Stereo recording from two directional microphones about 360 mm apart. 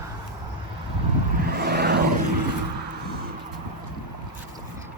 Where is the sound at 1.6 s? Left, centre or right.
Right.